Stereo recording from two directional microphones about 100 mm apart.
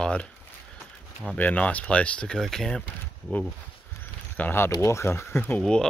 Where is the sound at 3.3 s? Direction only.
15° left (ahead or behind).